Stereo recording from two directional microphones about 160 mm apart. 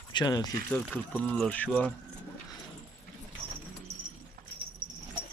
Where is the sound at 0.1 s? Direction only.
25° left (ahead or behind).